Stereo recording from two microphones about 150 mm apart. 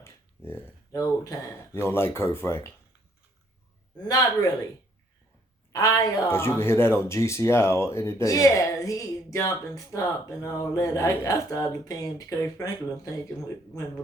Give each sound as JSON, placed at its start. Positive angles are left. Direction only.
{"t": 0.0, "sound": "speech", "side_deg": 15}
{"t": 4.1, "sound": "speech", "side_deg": 25}
{"t": 5.7, "sound": "speech", "side_deg": 25}